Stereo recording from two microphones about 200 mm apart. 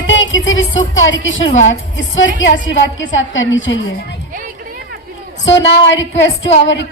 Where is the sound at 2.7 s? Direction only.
70° left (ahead or behind).